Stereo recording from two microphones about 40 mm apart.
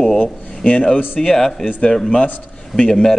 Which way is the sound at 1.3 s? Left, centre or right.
Centre.